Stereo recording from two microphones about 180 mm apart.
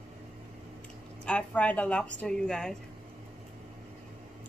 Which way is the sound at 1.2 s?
5° left (ahead or behind).